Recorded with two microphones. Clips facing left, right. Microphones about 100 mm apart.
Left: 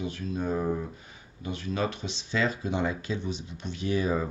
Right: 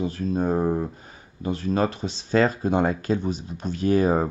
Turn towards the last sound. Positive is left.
turn(degrees=-45)  # may be behind; listen again after turning